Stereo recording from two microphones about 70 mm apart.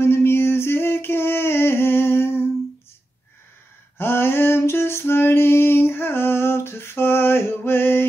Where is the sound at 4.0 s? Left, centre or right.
Left.